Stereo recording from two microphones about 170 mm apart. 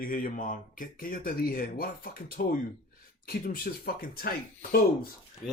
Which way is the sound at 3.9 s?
60° left (ahead or behind).